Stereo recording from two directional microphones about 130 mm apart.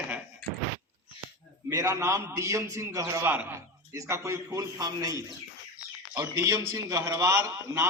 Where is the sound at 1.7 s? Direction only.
25° right (ahead or behind).